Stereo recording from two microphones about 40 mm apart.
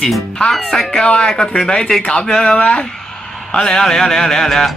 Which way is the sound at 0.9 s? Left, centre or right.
Left.